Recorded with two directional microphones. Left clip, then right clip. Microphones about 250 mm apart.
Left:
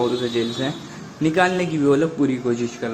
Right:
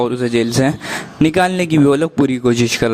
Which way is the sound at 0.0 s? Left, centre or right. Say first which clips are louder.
Right 5 dB; right.